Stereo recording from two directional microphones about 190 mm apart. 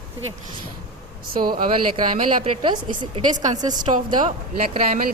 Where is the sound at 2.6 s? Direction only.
25° right (ahead or behind).